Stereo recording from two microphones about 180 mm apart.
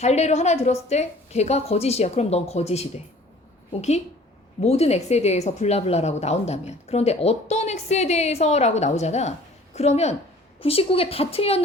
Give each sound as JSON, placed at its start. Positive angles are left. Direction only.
{"t": 0.0, "sound": "a woman's voice", "side_deg": 40}